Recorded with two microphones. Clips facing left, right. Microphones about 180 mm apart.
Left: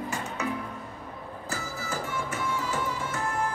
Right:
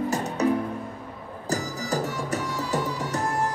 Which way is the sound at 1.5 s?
40° right (ahead or behind).